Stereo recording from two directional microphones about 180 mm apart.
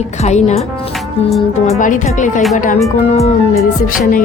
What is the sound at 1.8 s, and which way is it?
Speech, 45° left (ahead or behind).